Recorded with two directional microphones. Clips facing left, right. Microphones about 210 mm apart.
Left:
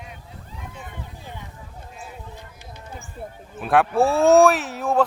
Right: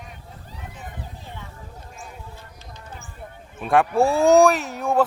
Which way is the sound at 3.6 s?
Centre (ahead or behind).